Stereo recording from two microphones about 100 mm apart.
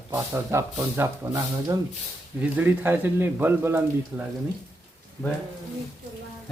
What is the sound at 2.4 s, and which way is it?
Speech, 20° right (ahead or behind).